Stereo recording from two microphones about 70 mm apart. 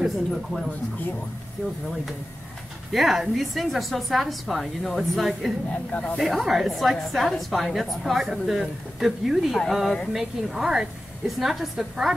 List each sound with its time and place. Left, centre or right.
0.0 s speech: centre
2.9 s a woman's voice: centre
5.7 s speech: centre
6.1 s a woman's voice: centre